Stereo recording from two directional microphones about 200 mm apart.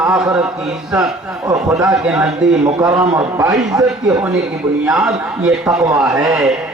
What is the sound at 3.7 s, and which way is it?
Speech, 15° right (ahead or behind).